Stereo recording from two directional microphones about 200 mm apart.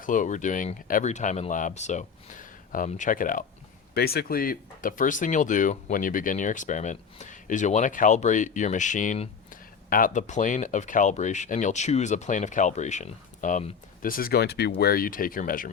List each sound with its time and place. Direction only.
0.0 s speech: 40° left (ahead or behind)